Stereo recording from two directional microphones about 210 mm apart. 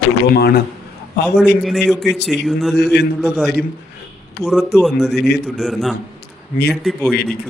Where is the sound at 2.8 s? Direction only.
55° left (ahead or behind).